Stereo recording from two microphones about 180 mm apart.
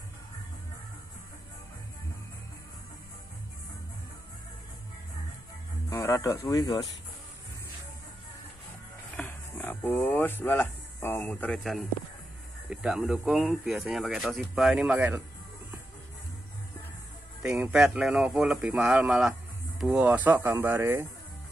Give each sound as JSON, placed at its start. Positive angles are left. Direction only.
{"t": 5.9, "sound": "speech", "side_deg": 20}
{"t": 9.1, "sound": "speech", "side_deg": 10}
{"t": 17.5, "sound": "speech", "side_deg": -10}